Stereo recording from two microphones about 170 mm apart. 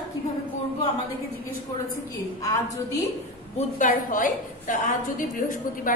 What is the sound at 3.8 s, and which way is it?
A woman's voice, 50° left (ahead or behind).